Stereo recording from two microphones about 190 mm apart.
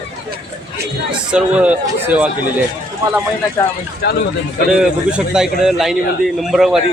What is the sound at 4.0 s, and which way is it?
Speech, 60° left (ahead or behind).